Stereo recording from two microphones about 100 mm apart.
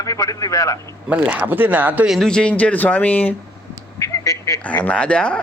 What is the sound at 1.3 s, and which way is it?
Speech, 15° right (ahead or behind).